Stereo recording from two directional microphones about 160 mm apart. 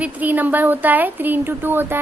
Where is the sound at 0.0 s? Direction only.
10° right (ahead or behind).